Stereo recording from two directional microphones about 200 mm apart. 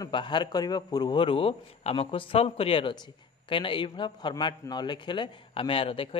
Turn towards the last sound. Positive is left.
turn(degrees=25)  # may be behind; listen again after turning